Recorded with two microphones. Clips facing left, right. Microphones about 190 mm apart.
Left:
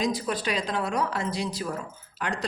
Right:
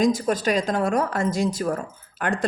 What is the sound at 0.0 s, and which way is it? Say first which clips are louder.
Speech: right 7 dB; 45° right (ahead or behind).